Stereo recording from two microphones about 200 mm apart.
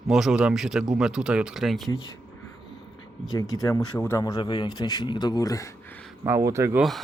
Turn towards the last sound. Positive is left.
turn(degrees=-10)  # may be behind; listen again after turning